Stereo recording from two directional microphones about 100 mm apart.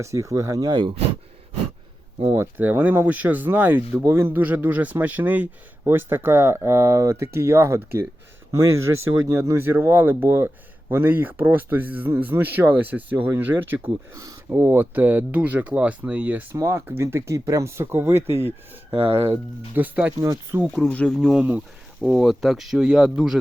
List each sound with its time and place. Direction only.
0.0 s speech: 30° right (ahead or behind); by 0.9 s 50° right (ahead or behind)
2.6 s speech: 15° right (ahead or behind)
14.2 s speech: 35° right (ahead or behind)
14.6 s speech: 20° right (ahead or behind)
18.9 s speech: 65° right (ahead or behind)
19.2 s speech: 20° right (ahead or behind)
20.1 s speech: 30° right (ahead or behind)
20.9 s speech: 10° left (ahead or behind)
21.2 s speech: centre (ahead or behind)